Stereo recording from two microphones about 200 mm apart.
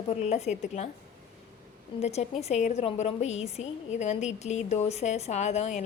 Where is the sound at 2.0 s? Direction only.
35° left (ahead or behind).